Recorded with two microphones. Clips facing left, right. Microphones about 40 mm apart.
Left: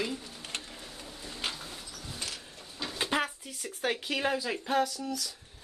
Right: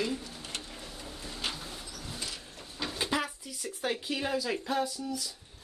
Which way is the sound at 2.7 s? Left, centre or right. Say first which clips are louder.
Right 1 dB; centre.